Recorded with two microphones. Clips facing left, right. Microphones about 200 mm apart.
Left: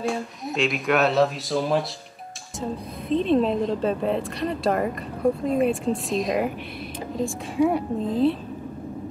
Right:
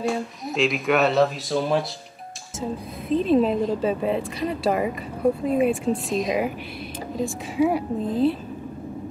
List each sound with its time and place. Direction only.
0.0 s a woman's voice: centre (ahead or behind)